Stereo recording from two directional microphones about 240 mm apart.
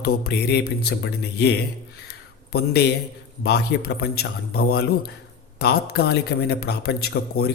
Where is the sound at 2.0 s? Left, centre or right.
Left.